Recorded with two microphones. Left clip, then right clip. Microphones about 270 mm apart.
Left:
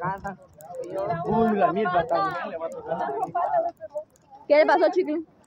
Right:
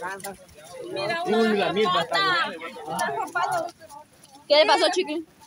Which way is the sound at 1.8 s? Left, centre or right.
Centre.